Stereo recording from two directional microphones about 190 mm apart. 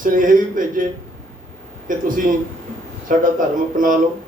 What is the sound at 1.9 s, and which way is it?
A man's voice, 45° right (ahead or behind).